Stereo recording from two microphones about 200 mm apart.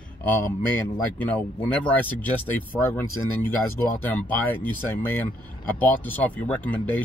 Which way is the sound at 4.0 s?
10° left (ahead or behind).